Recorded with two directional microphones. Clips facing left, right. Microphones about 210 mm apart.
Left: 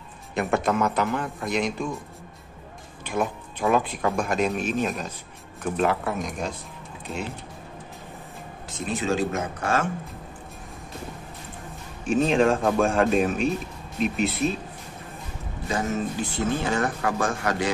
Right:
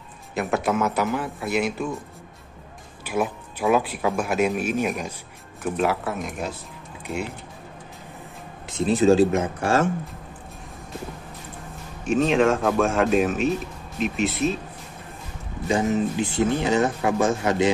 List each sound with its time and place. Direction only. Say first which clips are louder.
0.3 s speech: even; centre (ahead or behind)
3.1 s speech: right 2 dB; 5° right (ahead or behind)
8.6 s speech: right 9 dB; 35° right (ahead or behind)
12.1 s speech: right 1 dB; centre (ahead or behind)
15.7 s speech: right 5 dB; 20° right (ahead or behind)